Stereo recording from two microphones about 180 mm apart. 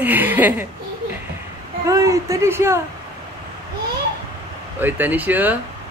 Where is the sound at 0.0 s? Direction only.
10° right (ahead or behind).